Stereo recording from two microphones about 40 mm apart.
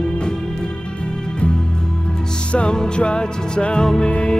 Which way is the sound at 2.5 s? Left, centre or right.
Left.